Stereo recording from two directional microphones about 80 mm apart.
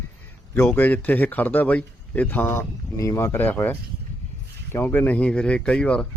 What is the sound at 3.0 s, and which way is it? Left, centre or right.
Speech, left.